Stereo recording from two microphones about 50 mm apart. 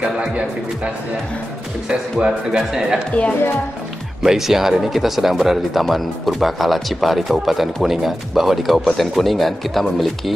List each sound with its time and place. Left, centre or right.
1.9 s speech: centre
4.2 s speech: centre